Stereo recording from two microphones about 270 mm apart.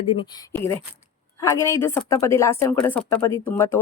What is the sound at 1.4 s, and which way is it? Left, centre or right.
A woman's voice, centre.